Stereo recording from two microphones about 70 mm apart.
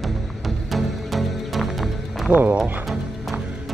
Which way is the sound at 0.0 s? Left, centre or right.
Centre.